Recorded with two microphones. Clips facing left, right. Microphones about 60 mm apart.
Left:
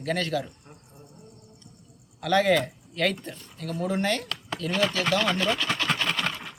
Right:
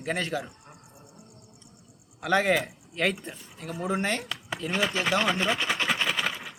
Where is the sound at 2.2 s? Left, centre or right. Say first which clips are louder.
Left 2 dB; right.